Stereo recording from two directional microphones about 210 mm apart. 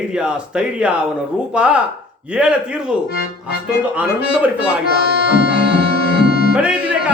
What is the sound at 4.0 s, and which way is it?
Speech, 5° right (ahead or behind).